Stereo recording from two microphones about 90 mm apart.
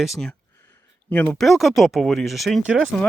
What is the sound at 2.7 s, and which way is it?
Speech, 10° right (ahead or behind).